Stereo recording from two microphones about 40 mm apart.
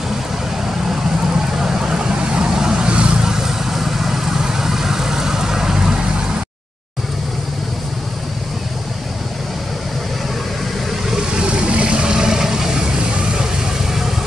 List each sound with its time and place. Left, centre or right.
1.6 s vehicle: centre
3.2 s vehicle: centre
11.3 s vehicle: right